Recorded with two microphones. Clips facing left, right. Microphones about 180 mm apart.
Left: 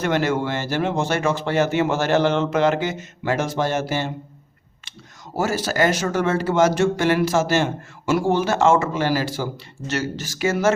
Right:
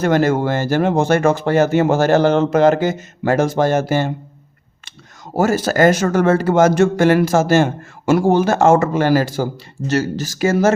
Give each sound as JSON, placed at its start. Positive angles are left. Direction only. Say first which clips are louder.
{"t": 0.0, "sound": "speech", "louder": "right 6 dB", "side_deg": -40}
{"t": 5.4, "sound": "speech", "louder": "right 6 dB", "side_deg": -50}